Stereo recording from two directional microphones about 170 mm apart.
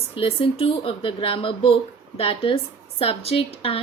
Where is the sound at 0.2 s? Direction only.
35° left (ahead or behind).